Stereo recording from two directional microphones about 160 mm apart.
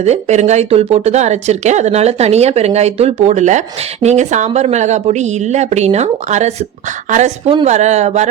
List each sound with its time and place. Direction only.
0.0 s speech: 45° right (ahead or behind)